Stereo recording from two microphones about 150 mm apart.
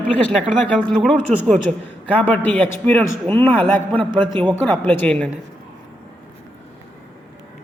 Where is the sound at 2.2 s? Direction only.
10° left (ahead or behind).